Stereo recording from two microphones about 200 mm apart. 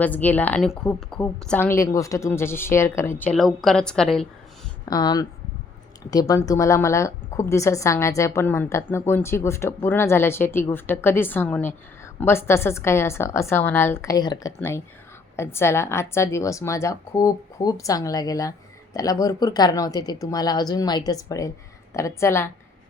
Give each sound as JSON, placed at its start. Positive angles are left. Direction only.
{"t": 0.0, "sound": "a woman's voice", "side_deg": 10}
{"t": 4.9, "sound": "a woman's voice", "side_deg": 20}